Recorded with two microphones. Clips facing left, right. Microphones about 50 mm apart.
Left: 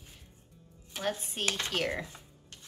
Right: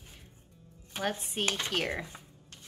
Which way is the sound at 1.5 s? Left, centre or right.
Centre.